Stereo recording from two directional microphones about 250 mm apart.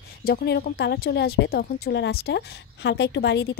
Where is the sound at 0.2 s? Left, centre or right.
Left.